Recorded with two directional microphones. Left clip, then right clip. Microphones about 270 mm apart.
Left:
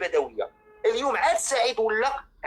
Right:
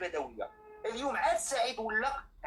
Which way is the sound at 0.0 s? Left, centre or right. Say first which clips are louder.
Left 11 dB; left.